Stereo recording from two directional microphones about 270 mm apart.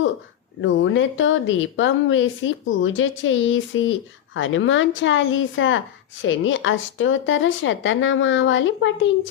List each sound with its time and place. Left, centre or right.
0.6 s a woman's voice: left